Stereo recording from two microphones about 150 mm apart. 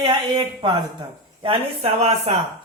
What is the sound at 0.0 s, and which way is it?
Speech, 30° right (ahead or behind).